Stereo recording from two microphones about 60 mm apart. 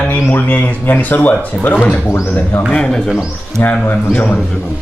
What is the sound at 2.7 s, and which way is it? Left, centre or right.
Speech, centre.